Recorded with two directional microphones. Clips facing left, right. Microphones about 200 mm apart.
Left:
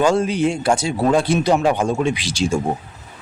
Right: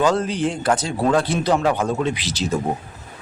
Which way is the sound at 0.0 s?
10° left (ahead or behind).